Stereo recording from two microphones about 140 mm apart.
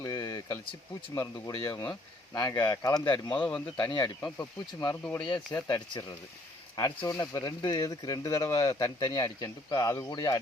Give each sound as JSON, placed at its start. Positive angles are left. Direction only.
{"t": 0.0, "sound": "a sound", "side_deg": 30}
{"t": 1.1, "sound": "speech", "side_deg": 25}
{"t": 3.3, "sound": "speech", "side_deg": 10}
{"t": 3.8, "sound": "speech", "side_deg": 35}
{"t": 5.2, "sound": "speech", "side_deg": 35}